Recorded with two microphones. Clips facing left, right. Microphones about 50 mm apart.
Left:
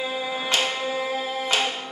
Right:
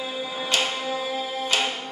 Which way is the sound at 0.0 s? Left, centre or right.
Left.